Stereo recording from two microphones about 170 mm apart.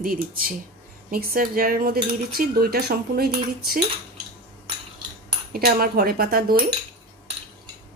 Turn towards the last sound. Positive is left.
turn(degrees=-65)  # may be behind; listen again after turning